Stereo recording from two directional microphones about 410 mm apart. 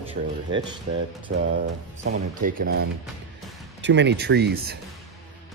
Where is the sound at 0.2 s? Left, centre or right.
Centre.